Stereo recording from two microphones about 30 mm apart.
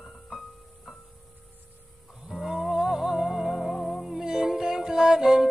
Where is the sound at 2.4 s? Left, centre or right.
Centre.